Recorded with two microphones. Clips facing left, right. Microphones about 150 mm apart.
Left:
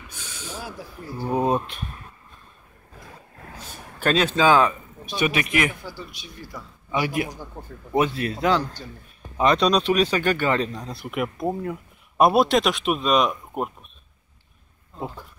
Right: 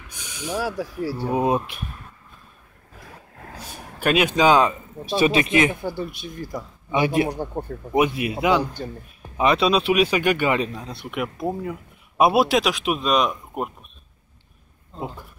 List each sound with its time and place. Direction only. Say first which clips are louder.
0.1 s a sound: right 9 dB; 15° right (ahead or behind)
0.6 s speech: right 13 dB; 80° right
1.3 s a man's voice: even; 10° right (ahead or behind)
4.0 s speech: right 1 dB; 10° right (ahead or behind)
5.8 s speech: right 9 dB; 55° right (ahead or behind)
6.9 s speech: right 4 dB; 25° right (ahead or behind)
7.2 s speech: right 10 dB; 60° right (ahead or behind)
7.9 s a man's voice: right 2 dB; 15° right (ahead or behind)
15.0 s a man's voice: right 1 dB; 10° right (ahead or behind)